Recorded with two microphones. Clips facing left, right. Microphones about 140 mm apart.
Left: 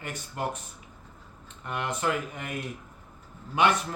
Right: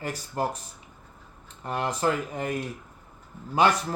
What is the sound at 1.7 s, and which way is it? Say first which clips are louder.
Speech: right 3 dB; 35° right (ahead or behind).